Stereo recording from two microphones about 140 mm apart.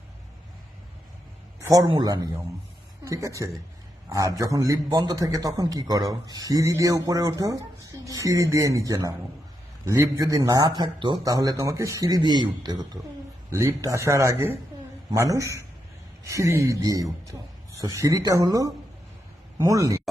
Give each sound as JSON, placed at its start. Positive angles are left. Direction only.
{"t": 1.6, "sound": "a man's voice", "side_deg": -25}
{"t": 3.0, "sound": "a man's voice", "side_deg": -25}